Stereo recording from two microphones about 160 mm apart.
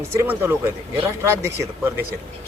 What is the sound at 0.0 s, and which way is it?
Speech, 15° right (ahead or behind).